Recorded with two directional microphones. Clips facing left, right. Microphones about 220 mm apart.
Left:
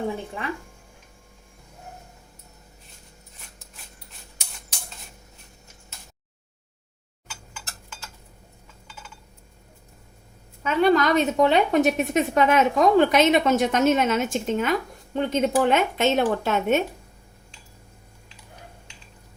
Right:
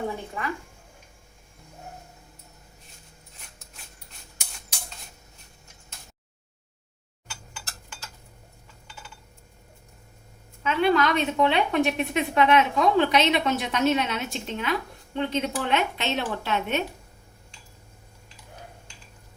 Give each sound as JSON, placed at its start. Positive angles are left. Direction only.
{"t": 10.6, "sound": "a woman's voice", "side_deg": 40}